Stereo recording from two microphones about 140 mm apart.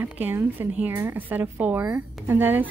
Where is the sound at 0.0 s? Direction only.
15° right (ahead or behind).